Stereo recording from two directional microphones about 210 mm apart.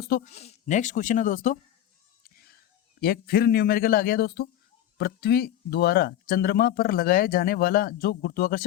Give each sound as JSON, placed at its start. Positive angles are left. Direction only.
{"t": 0.3, "sound": "speech", "side_deg": 30}
{"t": 2.2, "sound": "a sound", "side_deg": 45}
{"t": 3.0, "sound": "speech", "side_deg": 45}